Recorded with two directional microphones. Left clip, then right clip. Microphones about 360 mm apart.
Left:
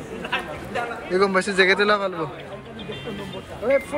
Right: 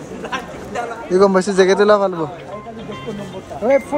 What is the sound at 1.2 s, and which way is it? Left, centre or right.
Speech, centre.